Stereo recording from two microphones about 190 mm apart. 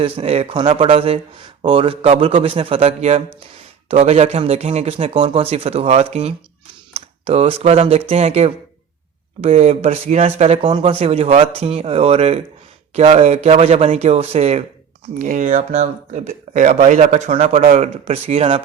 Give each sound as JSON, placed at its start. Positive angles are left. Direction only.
{"t": 0.0, "sound": "a man's voice", "side_deg": -30}